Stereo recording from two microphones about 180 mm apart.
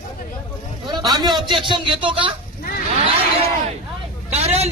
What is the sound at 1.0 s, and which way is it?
A man's voice, 25° right (ahead or behind).